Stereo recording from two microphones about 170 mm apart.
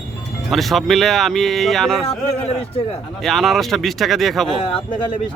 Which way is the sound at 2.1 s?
35° left (ahead or behind).